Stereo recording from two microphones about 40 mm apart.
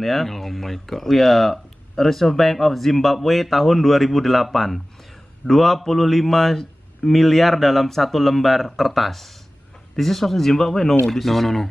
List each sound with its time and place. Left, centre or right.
0.0 s speech: centre